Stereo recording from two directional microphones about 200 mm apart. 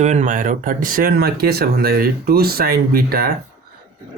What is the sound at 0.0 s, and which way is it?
Speech, 35° right (ahead or behind).